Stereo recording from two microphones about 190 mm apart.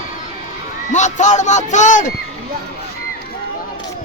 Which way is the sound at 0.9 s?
40° left (ahead or behind).